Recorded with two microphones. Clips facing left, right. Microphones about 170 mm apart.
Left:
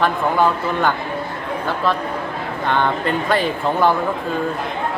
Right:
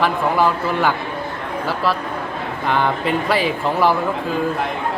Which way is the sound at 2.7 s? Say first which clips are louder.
Even; 5° right (ahead or behind).